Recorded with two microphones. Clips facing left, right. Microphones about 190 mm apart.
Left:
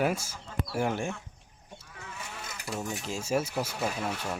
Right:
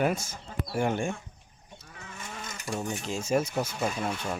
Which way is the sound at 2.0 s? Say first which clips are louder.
Even; 65° left (ahead or behind).